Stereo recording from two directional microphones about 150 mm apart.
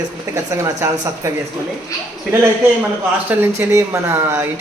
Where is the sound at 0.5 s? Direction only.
20° right (ahead or behind).